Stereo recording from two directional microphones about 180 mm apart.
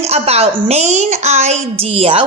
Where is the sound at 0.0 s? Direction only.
35° right (ahead or behind).